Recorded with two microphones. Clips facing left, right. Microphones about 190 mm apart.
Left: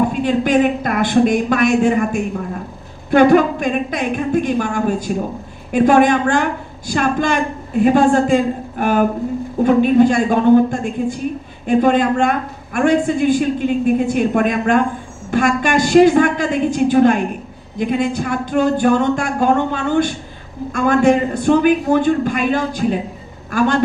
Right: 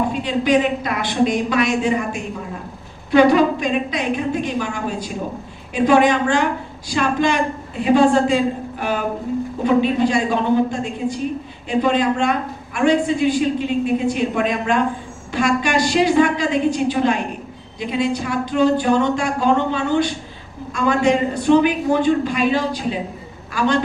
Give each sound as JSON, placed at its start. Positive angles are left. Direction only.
{"t": 0.1, "sound": "a woman's voice", "side_deg": 50}